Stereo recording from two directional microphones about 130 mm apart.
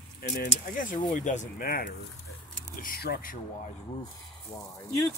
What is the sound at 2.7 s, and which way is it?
Speech, 90° left.